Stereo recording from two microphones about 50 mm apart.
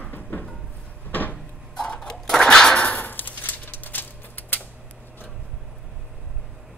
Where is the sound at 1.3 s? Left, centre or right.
Centre.